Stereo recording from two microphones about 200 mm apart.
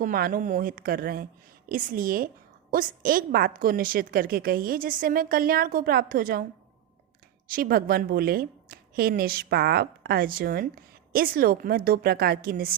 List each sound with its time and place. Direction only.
0.0 s a woman's voice: 45° right (ahead or behind)
7.4 s a woman's voice: 45° right (ahead or behind)